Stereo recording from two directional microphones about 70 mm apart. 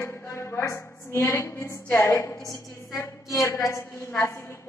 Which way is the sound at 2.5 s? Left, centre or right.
Left.